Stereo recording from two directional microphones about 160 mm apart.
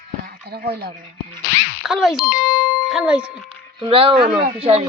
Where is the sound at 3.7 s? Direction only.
35° right (ahead or behind).